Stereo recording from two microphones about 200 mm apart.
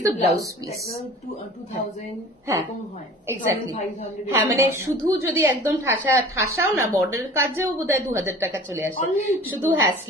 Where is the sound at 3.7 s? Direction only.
35° left (ahead or behind).